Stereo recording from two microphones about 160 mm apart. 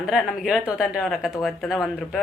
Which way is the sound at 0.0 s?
5° right (ahead or behind).